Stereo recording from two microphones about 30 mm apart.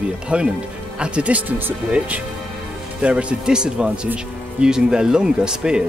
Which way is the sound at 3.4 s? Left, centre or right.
Right.